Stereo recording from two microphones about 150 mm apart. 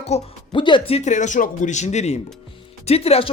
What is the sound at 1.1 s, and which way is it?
Speech, 55° left (ahead or behind).